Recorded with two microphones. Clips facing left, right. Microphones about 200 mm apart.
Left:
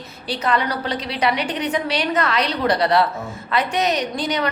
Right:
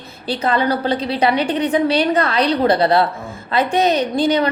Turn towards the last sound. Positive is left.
turn(degrees=-30)  # may be behind; listen again after turning